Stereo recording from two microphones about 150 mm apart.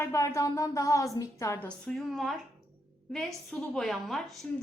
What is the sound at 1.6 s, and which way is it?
A woman's voice, 5° left (ahead or behind).